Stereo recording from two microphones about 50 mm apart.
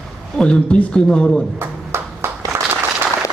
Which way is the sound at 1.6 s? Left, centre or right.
Right.